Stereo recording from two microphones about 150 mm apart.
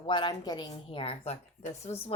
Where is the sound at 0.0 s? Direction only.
30° left (ahead or behind).